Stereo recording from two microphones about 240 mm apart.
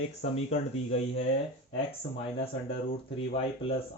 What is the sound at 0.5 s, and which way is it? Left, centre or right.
Speech, left.